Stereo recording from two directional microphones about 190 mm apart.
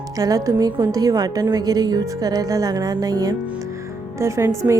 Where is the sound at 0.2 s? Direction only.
20° right (ahead or behind).